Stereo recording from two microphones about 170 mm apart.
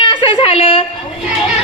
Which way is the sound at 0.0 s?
30° left (ahead or behind).